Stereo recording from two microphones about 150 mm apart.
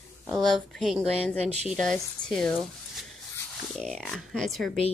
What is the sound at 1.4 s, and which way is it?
Speech, 45° right (ahead or behind).